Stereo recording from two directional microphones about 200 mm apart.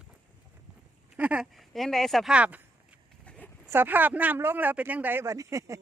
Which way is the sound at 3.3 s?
5° left (ahead or behind).